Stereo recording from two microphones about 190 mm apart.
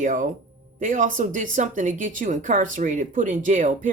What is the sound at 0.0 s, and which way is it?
A woman's voice, 45° right (ahead or behind).